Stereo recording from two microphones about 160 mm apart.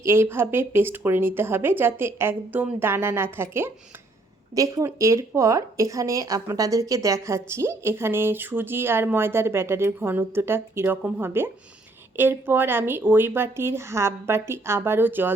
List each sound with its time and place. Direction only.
0.0 s speech: 15° right (ahead or behind)